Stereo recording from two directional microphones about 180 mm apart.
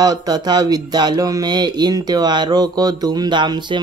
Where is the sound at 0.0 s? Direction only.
20° right (ahead or behind).